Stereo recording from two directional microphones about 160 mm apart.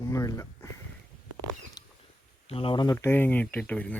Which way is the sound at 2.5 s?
35° left (ahead or behind).